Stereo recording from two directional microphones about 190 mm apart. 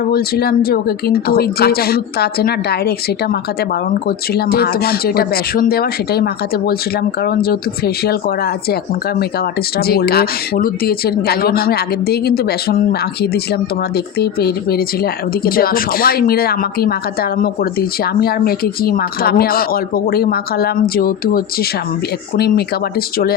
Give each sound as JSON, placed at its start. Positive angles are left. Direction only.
{"t": 0.0, "sound": "speech", "side_deg": 55}
{"t": 4.4, "sound": "speech", "side_deg": 55}
{"t": 9.7, "sound": "speech", "side_deg": 55}